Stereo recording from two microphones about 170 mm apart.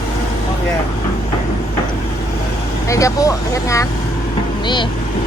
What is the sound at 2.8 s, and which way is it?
Speech, 20° left (ahead or behind).